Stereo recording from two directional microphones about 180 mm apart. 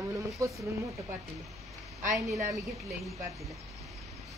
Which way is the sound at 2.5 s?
Centre (ahead or behind).